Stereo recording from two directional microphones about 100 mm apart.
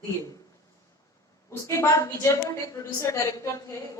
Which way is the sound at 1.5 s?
30° left (ahead or behind).